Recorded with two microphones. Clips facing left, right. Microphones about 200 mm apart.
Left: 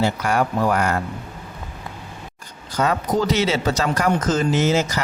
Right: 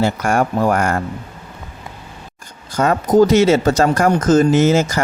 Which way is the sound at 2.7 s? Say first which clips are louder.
Right 8 dB; 50° right (ahead or behind).